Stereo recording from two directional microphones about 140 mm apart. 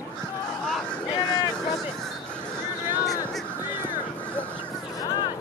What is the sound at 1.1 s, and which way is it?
Boat, 30° left (ahead or behind).